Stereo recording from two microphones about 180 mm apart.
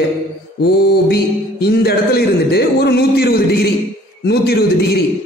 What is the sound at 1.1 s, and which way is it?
A man's voice, 60° left (ahead or behind).